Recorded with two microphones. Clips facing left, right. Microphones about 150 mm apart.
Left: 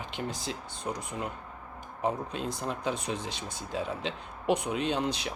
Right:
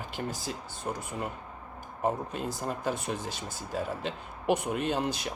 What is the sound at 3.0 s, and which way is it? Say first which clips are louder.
Speech: even; 75° left (ahead or behind).